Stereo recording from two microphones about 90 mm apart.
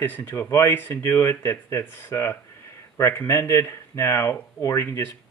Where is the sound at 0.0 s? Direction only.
25° left (ahead or behind).